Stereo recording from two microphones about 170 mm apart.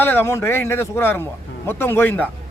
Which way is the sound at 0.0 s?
10° left (ahead or behind).